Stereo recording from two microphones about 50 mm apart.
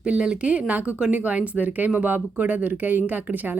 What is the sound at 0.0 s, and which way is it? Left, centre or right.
A woman's voice, right.